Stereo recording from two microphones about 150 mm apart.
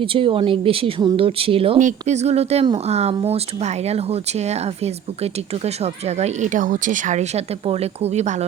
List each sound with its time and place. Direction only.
0.0 s speech: 35° right (ahead or behind)